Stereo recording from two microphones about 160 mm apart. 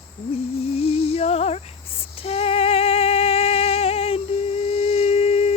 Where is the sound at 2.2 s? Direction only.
35° left (ahead or behind).